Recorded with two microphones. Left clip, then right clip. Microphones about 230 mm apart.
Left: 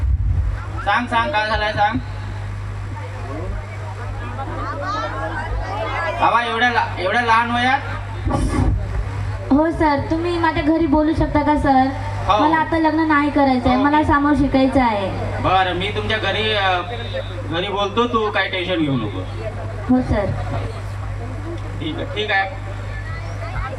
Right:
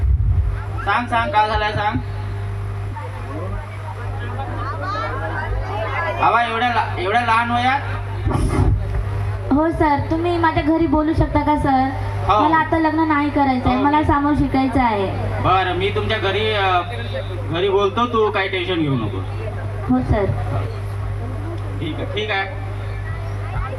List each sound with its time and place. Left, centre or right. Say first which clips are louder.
0.9 s a woman's voice: left 1 dB; left
4.6 s a sound: left 1 dB; centre
6.1 s a woman's voice: even; left
8.3 s music: left 1 dB; left
9.5 s a woman's voice: even; left
22.1 s a woman's voice: left 3 dB; left